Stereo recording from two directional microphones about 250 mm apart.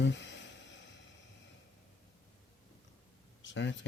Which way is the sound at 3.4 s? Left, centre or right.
Left.